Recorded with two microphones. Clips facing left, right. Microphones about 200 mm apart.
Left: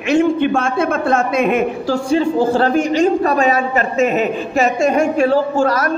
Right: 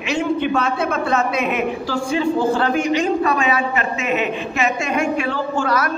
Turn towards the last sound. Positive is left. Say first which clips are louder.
# left 4 dB
turn(degrees=40)  # may be behind; listen again after turning